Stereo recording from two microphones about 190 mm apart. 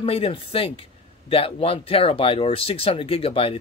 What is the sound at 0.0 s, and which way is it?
Speech, 30° left (ahead or behind).